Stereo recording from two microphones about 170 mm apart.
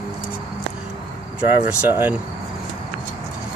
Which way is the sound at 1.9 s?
10° right (ahead or behind).